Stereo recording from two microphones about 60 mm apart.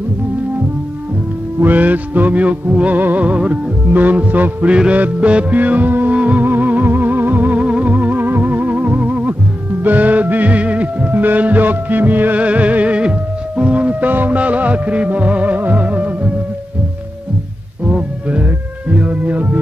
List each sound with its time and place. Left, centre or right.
1.6 s music: right
4.6 s music: centre
17.8 s music: right